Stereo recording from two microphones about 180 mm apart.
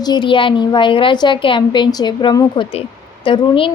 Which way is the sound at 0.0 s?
25° left (ahead or behind).